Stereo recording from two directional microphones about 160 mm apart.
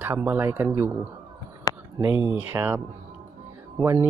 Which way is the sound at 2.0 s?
15° right (ahead or behind).